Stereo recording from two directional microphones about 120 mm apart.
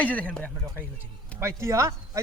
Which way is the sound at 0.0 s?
10° left (ahead or behind).